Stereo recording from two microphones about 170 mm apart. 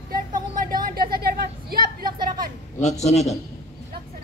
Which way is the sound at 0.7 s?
60° right (ahead or behind).